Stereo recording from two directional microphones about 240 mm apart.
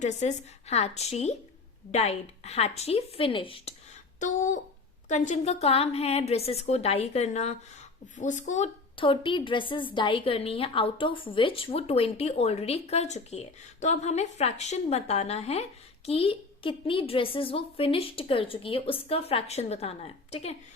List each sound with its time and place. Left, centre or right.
0.0 s a woman's voice: left
4.2 s a sound: left
5.0 s a woman's voice: left